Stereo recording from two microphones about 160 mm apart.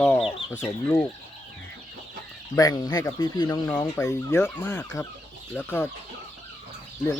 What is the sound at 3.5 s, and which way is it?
Speech, 15° left (ahead or behind).